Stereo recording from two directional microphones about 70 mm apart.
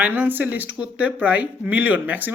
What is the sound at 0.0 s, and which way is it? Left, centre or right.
Speech, right.